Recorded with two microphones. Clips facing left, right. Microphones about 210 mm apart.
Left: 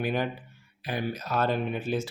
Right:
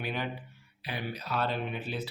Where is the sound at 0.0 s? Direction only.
45° left (ahead or behind).